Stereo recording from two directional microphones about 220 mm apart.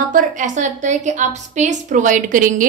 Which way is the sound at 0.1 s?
35° right (ahead or behind).